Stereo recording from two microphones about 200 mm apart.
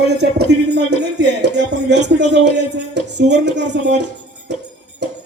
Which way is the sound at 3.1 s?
60° right (ahead or behind).